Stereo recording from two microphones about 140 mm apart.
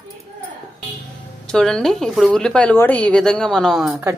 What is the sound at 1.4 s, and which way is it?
Speech, 5° left (ahead or behind).